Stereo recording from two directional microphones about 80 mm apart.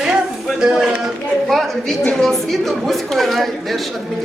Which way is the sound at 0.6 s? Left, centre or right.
Centre.